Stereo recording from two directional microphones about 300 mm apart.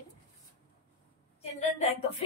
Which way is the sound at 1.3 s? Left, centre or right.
Left.